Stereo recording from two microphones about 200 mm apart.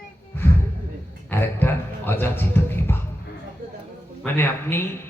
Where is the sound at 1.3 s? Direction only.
10° left (ahead or behind).